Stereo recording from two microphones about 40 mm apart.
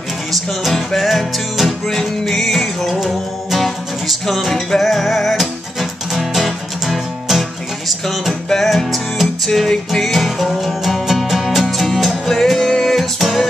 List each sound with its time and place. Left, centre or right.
0.3 s music: centre
8.3 s music: centre